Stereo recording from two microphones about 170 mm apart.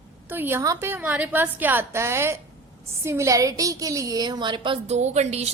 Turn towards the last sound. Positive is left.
turn(degrees=-40)  # may be behind; listen again after turning